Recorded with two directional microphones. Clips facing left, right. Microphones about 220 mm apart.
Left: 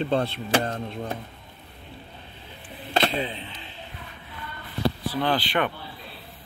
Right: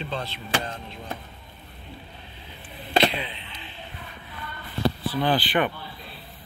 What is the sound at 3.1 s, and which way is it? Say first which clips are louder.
Speech: left 5 dB; 45° left (ahead or behind).